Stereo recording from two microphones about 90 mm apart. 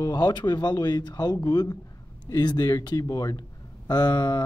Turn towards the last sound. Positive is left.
turn(degrees=50)  # may be behind; listen again after turning